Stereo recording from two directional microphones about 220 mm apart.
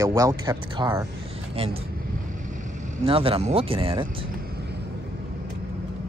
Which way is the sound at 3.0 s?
25° right (ahead or behind).